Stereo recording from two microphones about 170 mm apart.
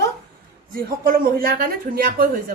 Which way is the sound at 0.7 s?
55° right (ahead or behind).